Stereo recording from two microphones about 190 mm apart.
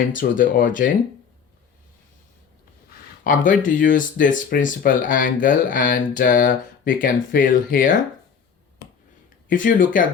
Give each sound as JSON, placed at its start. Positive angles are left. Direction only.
{"t": 0.1, "sound": "speech", "side_deg": 45}
{"t": 3.2, "sound": "speech", "side_deg": 45}
{"t": 8.8, "sound": "finger snapping", "side_deg": 60}
{"t": 9.5, "sound": "speech", "side_deg": 45}